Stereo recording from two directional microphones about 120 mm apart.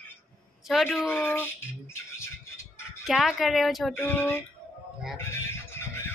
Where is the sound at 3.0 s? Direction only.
Centre (ahead or behind).